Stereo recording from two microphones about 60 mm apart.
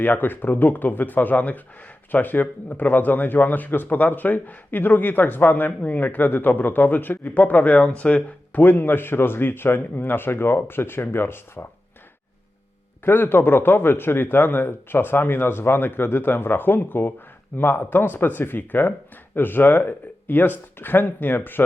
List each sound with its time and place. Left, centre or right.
0.0 s speech: left
13.1 s speech: left